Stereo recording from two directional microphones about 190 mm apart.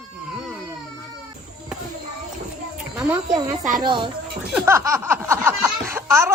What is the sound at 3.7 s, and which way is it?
Speech, 25° right (ahead or behind).